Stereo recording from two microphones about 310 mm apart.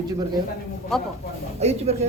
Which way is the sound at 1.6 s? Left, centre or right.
Centre.